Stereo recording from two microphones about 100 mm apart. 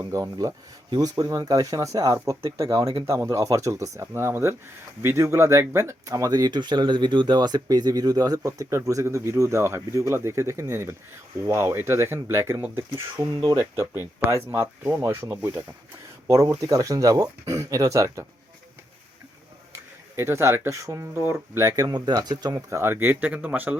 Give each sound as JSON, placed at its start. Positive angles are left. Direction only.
{"t": 0.0, "sound": "speech", "side_deg": -35}
{"t": 13.2, "sound": "speech", "side_deg": -40}
{"t": 16.3, "sound": "speech", "side_deg": -35}
{"t": 19.7, "sound": "speech", "side_deg": -25}
{"t": 22.5, "sound": "speech", "side_deg": -30}